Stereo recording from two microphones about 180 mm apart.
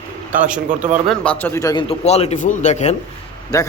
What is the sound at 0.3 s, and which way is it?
A man's voice, 5° right (ahead or behind).